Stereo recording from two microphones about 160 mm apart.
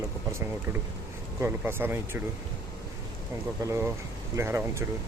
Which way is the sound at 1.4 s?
15° right (ahead or behind).